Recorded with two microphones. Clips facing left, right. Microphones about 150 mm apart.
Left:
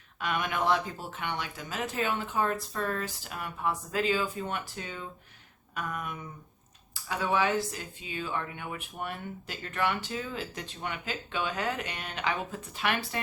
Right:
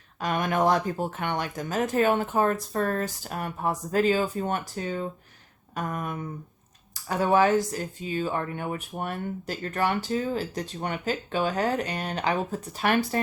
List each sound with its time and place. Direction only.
0.2 s speech: 40° right (ahead or behind)